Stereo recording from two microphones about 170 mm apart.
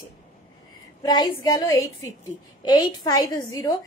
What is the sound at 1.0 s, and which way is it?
A woman's voice, 25° left (ahead or behind).